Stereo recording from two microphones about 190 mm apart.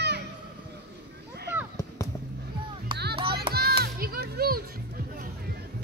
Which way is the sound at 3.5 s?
55° right (ahead or behind).